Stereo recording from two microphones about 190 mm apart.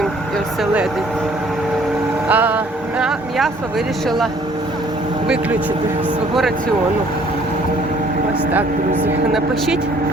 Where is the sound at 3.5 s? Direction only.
10° right (ahead or behind).